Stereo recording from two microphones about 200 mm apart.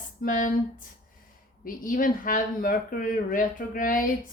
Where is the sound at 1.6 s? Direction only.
45° left (ahead or behind).